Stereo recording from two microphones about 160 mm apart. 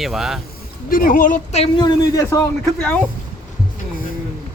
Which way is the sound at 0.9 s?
60° left (ahead or behind).